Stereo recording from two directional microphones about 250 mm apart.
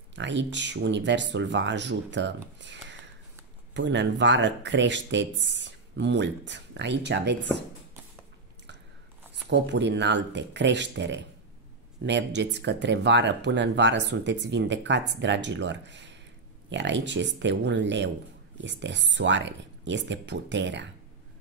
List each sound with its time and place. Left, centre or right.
0.1 s speech: right
9.3 s speech: right